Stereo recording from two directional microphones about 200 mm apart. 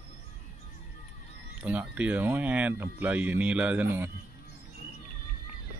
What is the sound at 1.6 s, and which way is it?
Speech, 5° right (ahead or behind).